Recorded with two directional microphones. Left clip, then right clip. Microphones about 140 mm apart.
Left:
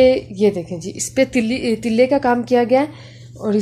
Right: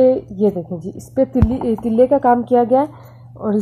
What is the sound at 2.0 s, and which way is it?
Speech, 10° right (ahead or behind).